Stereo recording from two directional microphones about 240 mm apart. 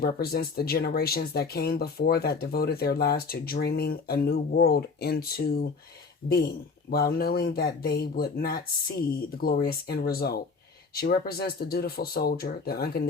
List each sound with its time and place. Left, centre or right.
0.0 s speech: left